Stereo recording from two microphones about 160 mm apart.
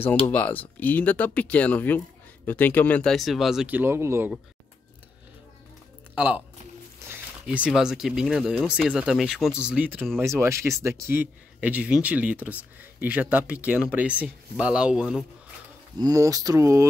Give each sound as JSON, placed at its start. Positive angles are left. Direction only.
{"t": 0.3, "sound": "speech", "side_deg": 10}
{"t": 6.1, "sound": "speech", "side_deg": -10}
{"t": 16.0, "sound": "speech", "side_deg": -20}